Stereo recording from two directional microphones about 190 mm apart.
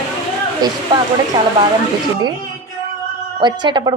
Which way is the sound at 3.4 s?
25° right (ahead or behind).